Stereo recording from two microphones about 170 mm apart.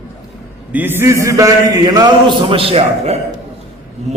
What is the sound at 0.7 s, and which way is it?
A man's voice, 10° right (ahead or behind).